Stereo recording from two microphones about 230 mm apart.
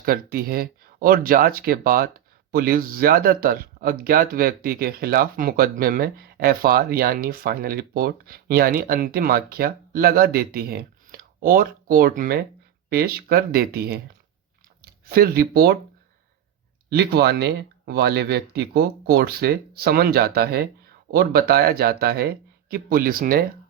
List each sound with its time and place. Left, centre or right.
0.0 s speech: right
16.9 s speech: right